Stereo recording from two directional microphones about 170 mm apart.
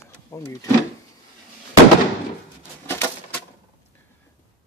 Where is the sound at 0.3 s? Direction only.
20° left (ahead or behind).